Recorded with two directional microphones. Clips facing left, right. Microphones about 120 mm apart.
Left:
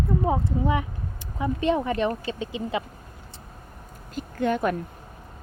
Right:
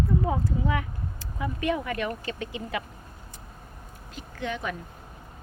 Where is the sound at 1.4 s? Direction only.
25° left (ahead or behind).